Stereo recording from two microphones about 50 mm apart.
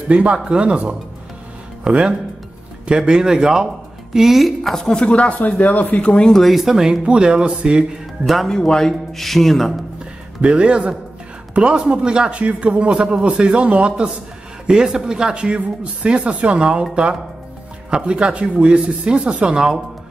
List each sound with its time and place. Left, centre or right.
0.1 s speech: right; by 5.0 s centre
5.0 s speech: left
6.3 s speech: centre
7.1 s speech: centre
8.5 s speech: centre
10.4 s speech: right